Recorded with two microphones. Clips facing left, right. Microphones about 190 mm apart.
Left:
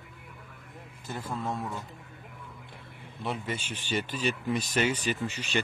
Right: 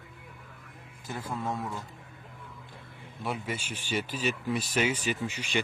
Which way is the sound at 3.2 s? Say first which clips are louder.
Even; 10° right (ahead or behind).